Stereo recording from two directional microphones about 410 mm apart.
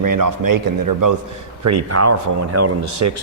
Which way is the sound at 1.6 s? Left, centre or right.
Right.